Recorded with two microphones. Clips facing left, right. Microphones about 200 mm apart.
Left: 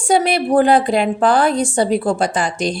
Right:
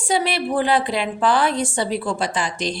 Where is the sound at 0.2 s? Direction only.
45° left (ahead or behind).